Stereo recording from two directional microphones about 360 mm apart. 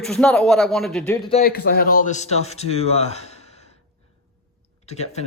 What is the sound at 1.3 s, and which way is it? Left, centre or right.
A man's voice, left.